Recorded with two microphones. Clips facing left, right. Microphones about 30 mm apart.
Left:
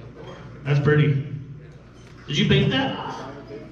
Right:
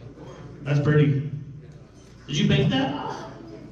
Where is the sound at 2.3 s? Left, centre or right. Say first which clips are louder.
Left 2 dB; left.